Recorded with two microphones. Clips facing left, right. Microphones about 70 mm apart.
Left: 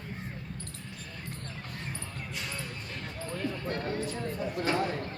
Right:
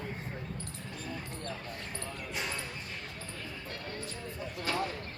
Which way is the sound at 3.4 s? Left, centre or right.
Left.